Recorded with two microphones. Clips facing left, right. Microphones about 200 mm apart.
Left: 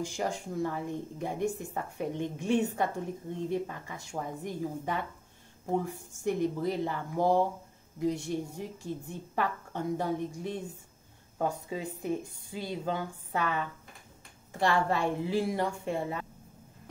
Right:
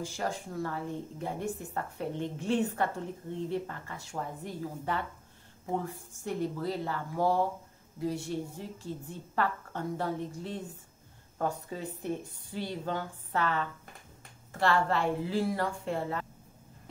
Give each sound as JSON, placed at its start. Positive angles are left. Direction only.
{"t": 0.0, "sound": "a woman's voice", "side_deg": 15}
{"t": 6.2, "sound": "a woman's voice", "side_deg": 15}